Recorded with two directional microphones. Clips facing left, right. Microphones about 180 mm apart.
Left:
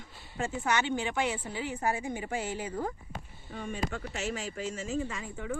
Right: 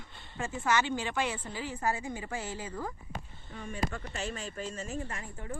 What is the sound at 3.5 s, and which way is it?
Speech, 90° left.